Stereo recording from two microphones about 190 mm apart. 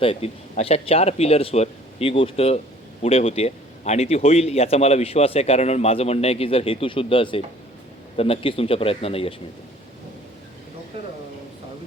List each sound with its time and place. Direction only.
0.0 s a man's voice: 30° left (ahead or behind)